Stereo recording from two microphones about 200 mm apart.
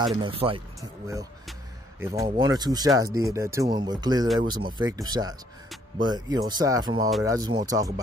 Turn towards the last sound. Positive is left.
turn(degrees=-20)  # may be behind; listen again after turning